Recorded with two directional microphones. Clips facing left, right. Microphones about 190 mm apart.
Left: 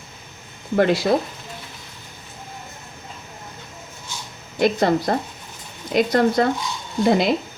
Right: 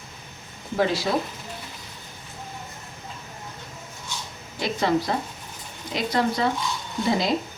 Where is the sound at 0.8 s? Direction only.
60° left (ahead or behind).